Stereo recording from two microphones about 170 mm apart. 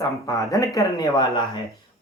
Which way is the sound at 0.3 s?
20° left (ahead or behind).